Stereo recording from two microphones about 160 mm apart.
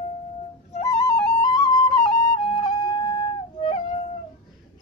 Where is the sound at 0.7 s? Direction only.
35° left (ahead or behind).